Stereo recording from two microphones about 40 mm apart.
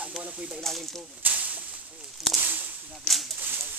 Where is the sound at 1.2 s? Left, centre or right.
Right.